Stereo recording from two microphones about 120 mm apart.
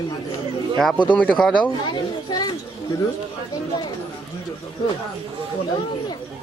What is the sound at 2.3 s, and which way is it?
Speech, 35° left (ahead or behind).